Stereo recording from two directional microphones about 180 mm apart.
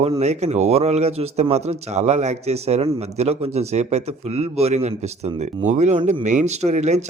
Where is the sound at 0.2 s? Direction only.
40° right (ahead or behind).